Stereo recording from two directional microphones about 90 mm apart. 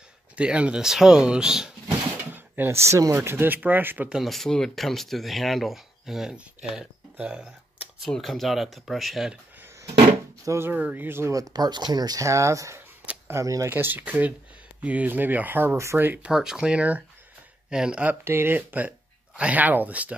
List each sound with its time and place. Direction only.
0.4 s speech: 10° right (ahead or behind)
2.3 s speech: 20° right (ahead or behind)
4.1 s speech: centre (ahead or behind)
8.0 s speech: centre (ahead or behind)
10.4 s speech: 35° right (ahead or behind)
10.7 s speech: 20° right (ahead or behind)
11.1 s speech: 30° right (ahead or behind)
11.3 s speech: 45° right (ahead or behind)
13.7 s speech: 20° right (ahead or behind)
16.3 s speech: 5° right (ahead or behind)
18.2 s speech: 25° right (ahead or behind)